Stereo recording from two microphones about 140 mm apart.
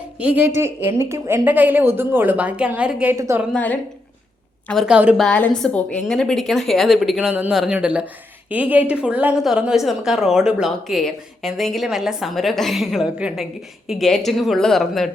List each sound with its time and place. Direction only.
0.2 s a woman's voice: 10° right (ahead or behind)
3.5 s a woman's voice: 10° left (ahead or behind)